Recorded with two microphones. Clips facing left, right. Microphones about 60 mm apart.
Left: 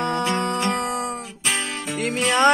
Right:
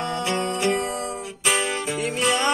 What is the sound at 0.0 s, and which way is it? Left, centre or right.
Music, left.